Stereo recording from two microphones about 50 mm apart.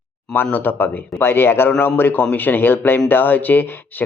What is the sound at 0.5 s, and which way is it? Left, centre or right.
A man's voice, left.